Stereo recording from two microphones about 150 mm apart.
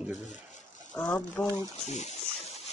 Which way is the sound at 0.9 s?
10° left (ahead or behind).